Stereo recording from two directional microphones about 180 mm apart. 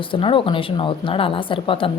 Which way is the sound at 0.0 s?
30° left (ahead or behind).